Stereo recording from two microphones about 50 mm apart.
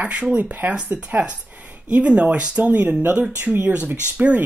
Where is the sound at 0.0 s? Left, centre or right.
Right.